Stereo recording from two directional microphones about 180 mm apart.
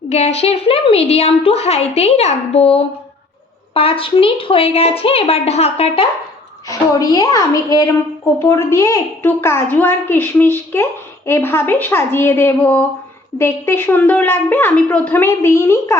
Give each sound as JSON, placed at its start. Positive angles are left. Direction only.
{"t": 0.1, "sound": "a woman's voice", "side_deg": 35}
{"t": 6.7, "sound": "a woman's voice", "side_deg": 20}